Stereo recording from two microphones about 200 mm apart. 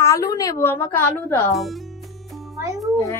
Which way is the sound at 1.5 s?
Centre (ahead or behind).